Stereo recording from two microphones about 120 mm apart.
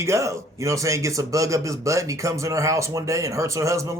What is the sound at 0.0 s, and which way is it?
Speech, 25° right (ahead or behind).